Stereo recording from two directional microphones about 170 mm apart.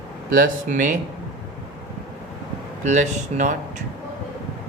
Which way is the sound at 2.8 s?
45° right (ahead or behind).